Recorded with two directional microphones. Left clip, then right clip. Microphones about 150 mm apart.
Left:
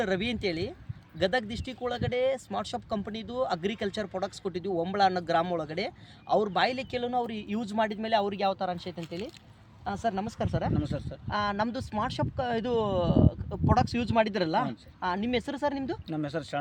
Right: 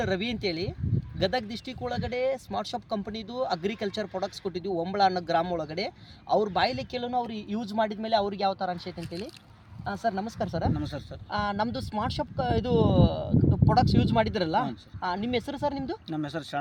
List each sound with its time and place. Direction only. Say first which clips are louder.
0.0 s speech: even; 5° right (ahead or behind)
9.8 s speech: right 1 dB; 30° right (ahead or behind)
10.8 s speech: left 1 dB; 10° left (ahead or behind)
11.3 s speech: even; 35° right (ahead or behind)
16.0 s speech: even; 15° left (ahead or behind)